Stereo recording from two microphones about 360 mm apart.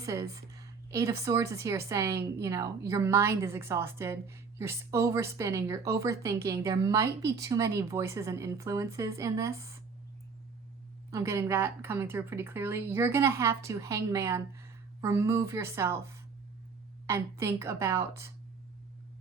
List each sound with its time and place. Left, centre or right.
0.0 s a woman's voice: centre
11.1 s a woman's voice: centre